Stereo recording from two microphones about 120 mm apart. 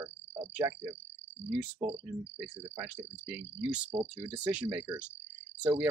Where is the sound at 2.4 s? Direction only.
25° right (ahead or behind).